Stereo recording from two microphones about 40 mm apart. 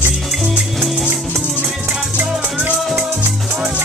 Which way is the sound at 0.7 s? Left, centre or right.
Centre.